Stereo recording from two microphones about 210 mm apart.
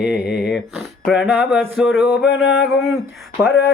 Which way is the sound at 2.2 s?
55° left (ahead or behind).